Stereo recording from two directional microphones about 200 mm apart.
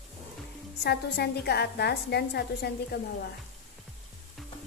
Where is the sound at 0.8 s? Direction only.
55° left (ahead or behind).